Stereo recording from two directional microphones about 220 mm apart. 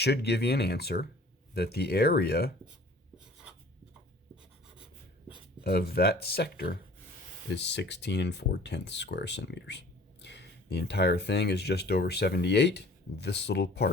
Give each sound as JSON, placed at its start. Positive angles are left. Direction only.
{"t": 0.0, "sound": "speech", "side_deg": 50}
{"t": 5.6, "sound": "speech", "side_deg": 45}